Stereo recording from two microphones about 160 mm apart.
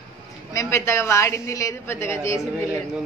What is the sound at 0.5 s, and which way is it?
A woman's voice, 15° left (ahead or behind).